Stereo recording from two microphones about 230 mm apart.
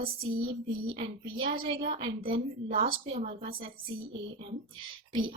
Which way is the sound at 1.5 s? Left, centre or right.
Right.